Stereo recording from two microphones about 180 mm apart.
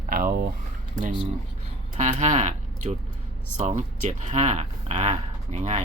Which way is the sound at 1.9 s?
40° right (ahead or behind).